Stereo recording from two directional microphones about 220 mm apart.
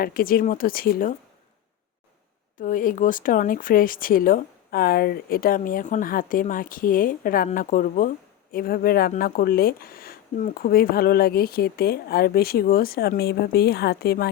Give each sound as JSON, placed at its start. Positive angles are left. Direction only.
{"t": 0.0, "sound": "speech", "side_deg": 40}
{"t": 2.6, "sound": "speech", "side_deg": 35}